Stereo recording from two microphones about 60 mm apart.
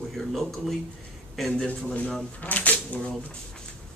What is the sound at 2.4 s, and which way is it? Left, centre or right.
Speech, left.